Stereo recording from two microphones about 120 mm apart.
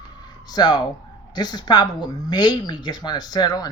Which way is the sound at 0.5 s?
35° left (ahead or behind).